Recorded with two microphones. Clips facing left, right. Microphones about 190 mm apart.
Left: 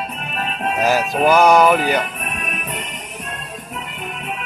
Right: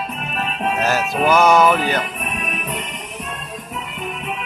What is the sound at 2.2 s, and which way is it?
Music, 45° left (ahead or behind).